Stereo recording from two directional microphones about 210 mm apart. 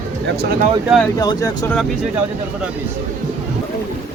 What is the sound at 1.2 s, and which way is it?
Speech, 20° left (ahead or behind).